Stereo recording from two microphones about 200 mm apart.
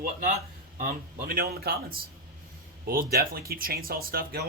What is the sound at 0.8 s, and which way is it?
Speech, 45° right (ahead or behind).